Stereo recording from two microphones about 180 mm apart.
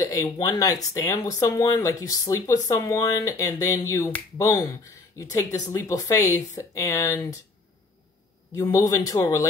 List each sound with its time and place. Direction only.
0.0 s speech: 20° left (ahead or behind)
8.5 s speech: 20° left (ahead or behind)